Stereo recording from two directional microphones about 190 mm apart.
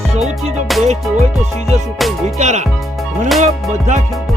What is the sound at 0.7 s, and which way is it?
Music, centre (ahead or behind).